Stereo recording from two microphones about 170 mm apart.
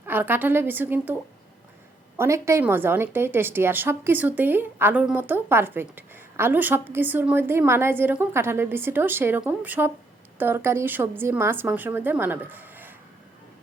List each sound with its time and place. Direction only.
0.0 s a woman's voice: 10° right (ahead or behind)
2.1 s a woman's voice: 15° right (ahead or behind)